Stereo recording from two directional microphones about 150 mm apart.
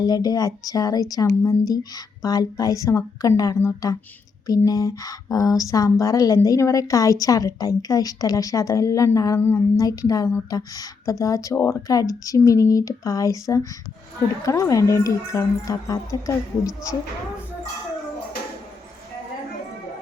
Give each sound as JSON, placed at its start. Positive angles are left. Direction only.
{"t": 0.0, "sound": "speech", "side_deg": 25}